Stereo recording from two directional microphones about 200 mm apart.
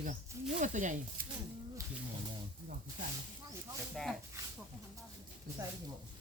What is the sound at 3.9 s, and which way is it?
Speech, centre (ahead or behind).